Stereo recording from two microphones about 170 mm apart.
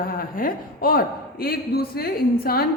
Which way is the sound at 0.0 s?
55° left (ahead or behind).